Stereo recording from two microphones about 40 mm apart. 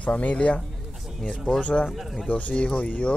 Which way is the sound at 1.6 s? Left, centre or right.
Left.